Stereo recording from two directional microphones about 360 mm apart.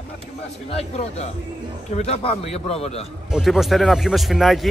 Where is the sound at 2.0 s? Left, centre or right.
Centre.